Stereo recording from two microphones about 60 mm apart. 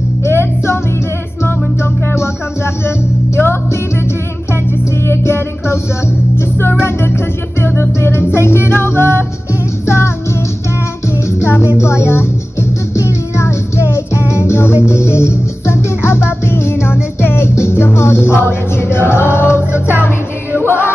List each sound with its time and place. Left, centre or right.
0.2 s music: left
5.0 s music: left
6.8 s music: left
11.2 s music: left